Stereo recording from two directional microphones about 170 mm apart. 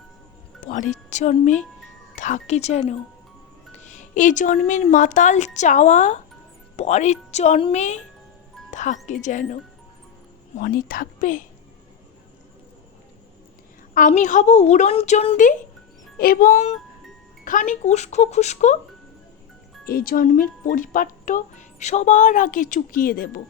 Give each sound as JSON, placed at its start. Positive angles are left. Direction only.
{"t": 0.6, "sound": "a woman's voice", "side_deg": 45}
{"t": 3.8, "sound": "a woman's voice", "side_deg": 45}
{"t": 10.6, "sound": "speech", "side_deg": 55}
{"t": 14.1, "sound": "a woman's voice", "side_deg": 45}
{"t": 16.1, "sound": "speech", "side_deg": 60}
{"t": 19.9, "sound": "speech", "side_deg": 60}